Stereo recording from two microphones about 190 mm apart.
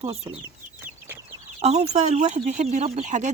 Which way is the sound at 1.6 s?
35° right (ahead or behind).